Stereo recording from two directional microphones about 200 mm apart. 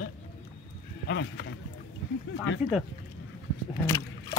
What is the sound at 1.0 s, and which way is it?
Speech, 60° left (ahead or behind).